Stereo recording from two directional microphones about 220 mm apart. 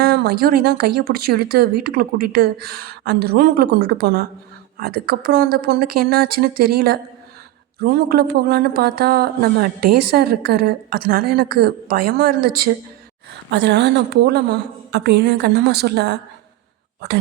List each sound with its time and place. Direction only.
0.0 s speech: 45° right (ahead or behind)